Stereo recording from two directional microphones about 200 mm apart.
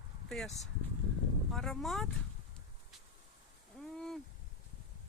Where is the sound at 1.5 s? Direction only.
Centre (ahead or behind).